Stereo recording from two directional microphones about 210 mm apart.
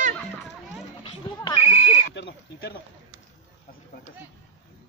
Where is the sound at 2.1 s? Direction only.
55° left (ahead or behind).